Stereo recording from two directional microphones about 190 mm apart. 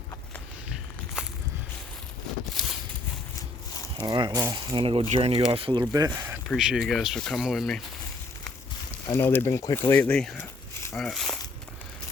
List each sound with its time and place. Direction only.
2.6 s a sound: centre (ahead or behind)
3.9 s speech: 25° right (ahead or behind)
6.5 s speech: centre (ahead or behind)
9.0 s speech: 10° left (ahead or behind)